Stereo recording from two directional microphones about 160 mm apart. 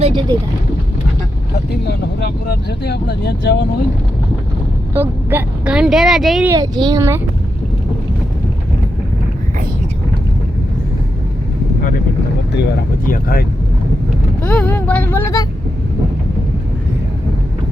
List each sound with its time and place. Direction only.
0.0 s speech: 30° right (ahead or behind)
1.5 s speech: 75° left (ahead or behind); by 3.8 s 90° left
4.9 s speech: 10° right (ahead or behind)
6.5 s a child's voice: 25° right (ahead or behind)
13.1 s speech: 70° left (ahead or behind)
14.4 s speech: 10° left (ahead or behind)